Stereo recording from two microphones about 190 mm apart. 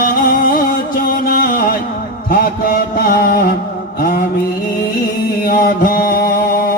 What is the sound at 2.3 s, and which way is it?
Mantra, 50° left (ahead or behind).